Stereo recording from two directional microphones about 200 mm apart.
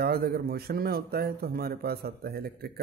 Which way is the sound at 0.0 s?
50° right (ahead or behind).